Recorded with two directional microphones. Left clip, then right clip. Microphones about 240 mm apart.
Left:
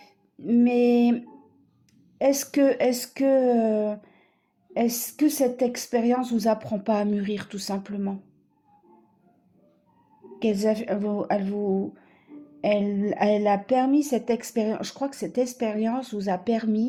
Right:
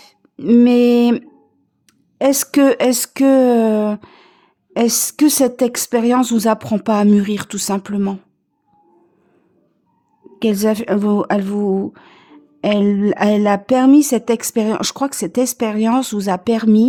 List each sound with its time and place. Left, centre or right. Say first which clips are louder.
0.0 s a sound: right 12 dB; right
2.1 s speech: right 7 dB; right
10.4 s speech: right 7 dB; right